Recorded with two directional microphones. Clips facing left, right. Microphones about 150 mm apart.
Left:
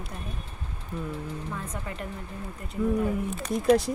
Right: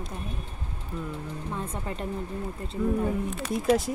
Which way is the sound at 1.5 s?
30° right (ahead or behind).